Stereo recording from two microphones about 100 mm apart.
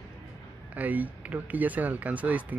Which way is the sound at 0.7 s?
15° right (ahead or behind).